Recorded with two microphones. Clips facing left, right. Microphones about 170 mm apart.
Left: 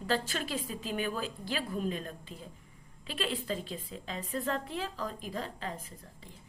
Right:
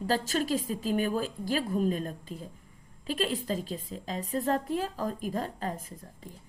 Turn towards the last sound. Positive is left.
turn(degrees=-45)  # may be behind; listen again after turning